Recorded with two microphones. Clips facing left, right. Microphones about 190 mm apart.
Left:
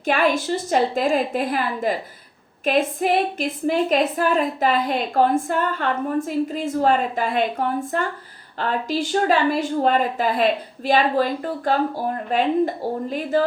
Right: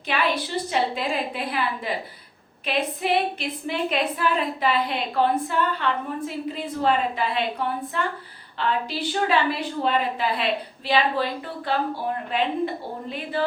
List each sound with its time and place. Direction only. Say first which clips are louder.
0.0 s a woman's voice: left 5 dB; 45° left (ahead or behind)